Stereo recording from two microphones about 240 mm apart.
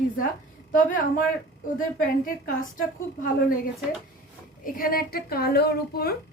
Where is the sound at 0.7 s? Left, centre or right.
Left.